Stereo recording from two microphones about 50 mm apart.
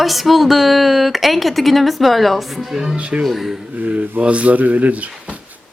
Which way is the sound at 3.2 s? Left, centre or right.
Centre.